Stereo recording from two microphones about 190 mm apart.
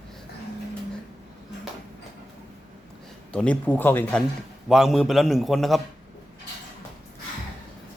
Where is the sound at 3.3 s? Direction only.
5° left (ahead or behind).